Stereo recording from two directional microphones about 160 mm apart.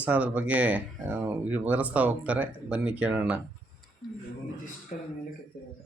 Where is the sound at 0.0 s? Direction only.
10° right (ahead or behind).